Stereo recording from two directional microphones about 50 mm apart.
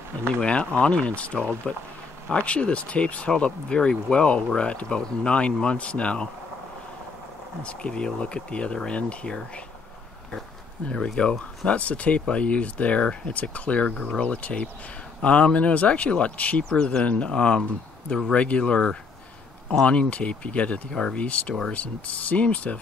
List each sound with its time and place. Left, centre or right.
0.4 s speech: left
1.6 s speech: centre
2.3 s speech: left
7.6 s speech: centre
11.1 s speech: left
20.9 s speech: centre